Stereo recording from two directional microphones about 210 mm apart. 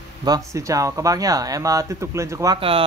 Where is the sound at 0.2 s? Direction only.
15° right (ahead or behind).